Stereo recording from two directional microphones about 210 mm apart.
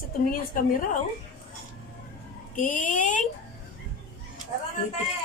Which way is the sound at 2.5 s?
40° left (ahead or behind).